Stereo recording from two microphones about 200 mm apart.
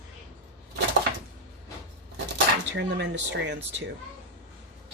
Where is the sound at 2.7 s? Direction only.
60° right (ahead or behind).